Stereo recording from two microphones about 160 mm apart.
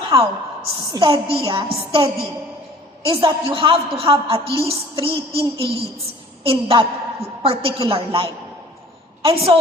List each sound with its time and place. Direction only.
0.1 s a sound: 35° right (ahead or behind)
0.9 s a woman's voice: 35° right (ahead or behind)
3.1 s a woman's voice: 35° right (ahead or behind)